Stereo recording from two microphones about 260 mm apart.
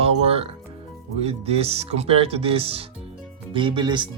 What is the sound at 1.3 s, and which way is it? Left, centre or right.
Speech, right.